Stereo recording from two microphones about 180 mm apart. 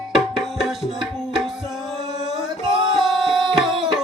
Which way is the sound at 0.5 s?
Centre (ahead or behind).